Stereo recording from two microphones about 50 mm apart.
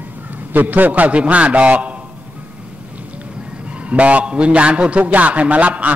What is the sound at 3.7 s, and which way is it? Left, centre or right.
A man's voice, right.